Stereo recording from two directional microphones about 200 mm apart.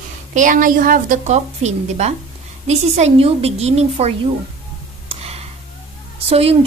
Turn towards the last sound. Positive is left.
turn(degrees=-30)  # may be behind; listen again after turning